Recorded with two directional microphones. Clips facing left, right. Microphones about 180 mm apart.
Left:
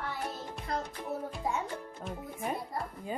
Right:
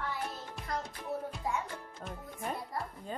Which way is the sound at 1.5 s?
25° left (ahead or behind).